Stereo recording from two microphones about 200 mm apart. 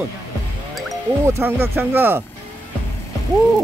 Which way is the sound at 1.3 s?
10° right (ahead or behind).